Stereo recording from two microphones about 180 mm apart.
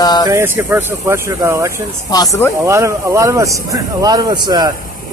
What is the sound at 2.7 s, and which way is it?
Speech, 15° right (ahead or behind).